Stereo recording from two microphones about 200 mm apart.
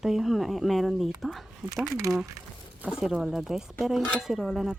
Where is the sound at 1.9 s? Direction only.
15° right (ahead or behind).